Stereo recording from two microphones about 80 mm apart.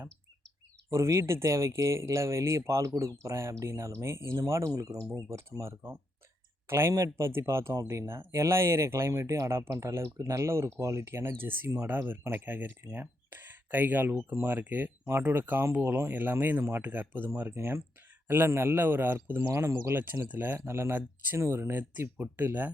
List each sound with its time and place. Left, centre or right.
0.9 s speech: right